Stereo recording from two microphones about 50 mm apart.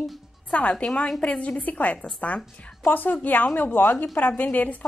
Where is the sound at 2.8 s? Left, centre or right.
Left.